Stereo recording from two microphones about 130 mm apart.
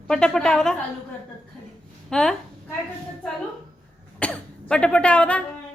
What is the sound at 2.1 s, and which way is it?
Speech, 5° left (ahead or behind).